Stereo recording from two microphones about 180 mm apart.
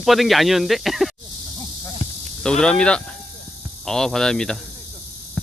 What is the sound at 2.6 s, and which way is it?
Speech, 5° left (ahead or behind).